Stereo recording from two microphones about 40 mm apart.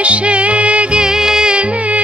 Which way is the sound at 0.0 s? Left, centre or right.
Right.